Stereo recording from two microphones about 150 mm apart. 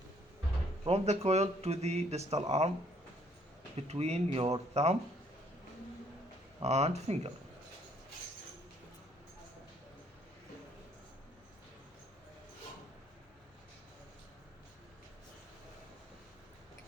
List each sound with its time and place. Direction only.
0.9 s speech: 45° right (ahead or behind)
3.8 s speech: 45° right (ahead or behind)
6.6 s speech: 45° right (ahead or behind)